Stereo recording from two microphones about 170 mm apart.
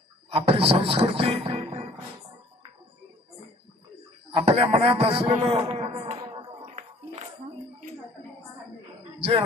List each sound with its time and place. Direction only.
0.3 s speech: 35° right (ahead or behind)
4.3 s a man's voice: 35° right (ahead or behind)